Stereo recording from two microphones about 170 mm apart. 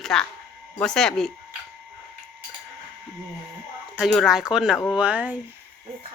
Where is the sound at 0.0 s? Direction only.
5° left (ahead or behind).